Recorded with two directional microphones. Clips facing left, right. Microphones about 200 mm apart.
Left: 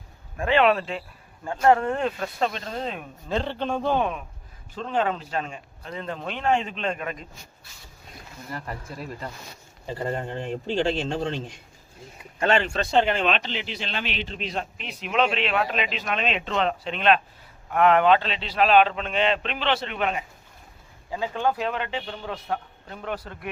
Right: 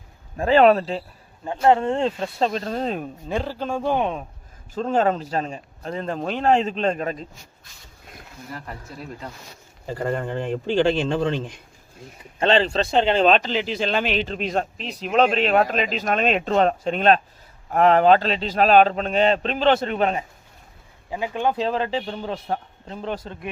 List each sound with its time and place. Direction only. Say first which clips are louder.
0.3 s speech: right 5 dB; 35° right (ahead or behind)
1.5 s speech: right 2 dB; 25° right (ahead or behind)
2.5 s speech: right 6 dB; 40° right (ahead or behind)
3.2 s speech: even; 5° right (ahead or behind)
4.7 s speech: right 5 dB; 45° right (ahead or behind)
8.4 s speech: left 1 dB; centre (ahead or behind)
9.8 s speech: right 3 dB; 50° right (ahead or behind)
12.4 s speech: right 4 dB; 30° right (ahead or behind)
12.9 s speech: even; 20° right (ahead or behind)
13.1 s speech: right 8 dB; 40° right (ahead or behind)
21.1 s speech: right 2 dB; 15° right (ahead or behind)
21.6 s speech: right 5 dB; 35° right (ahead or behind)